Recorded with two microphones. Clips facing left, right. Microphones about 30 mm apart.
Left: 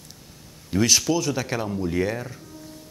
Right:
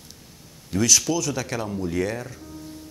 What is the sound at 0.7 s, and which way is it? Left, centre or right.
Speech, centre.